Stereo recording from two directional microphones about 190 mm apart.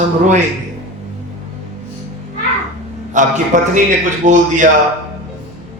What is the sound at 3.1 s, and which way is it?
A man's voice, 40° right (ahead or behind).